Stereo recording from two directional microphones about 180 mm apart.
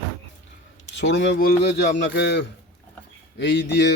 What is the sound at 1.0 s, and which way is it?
Speech, 85° left.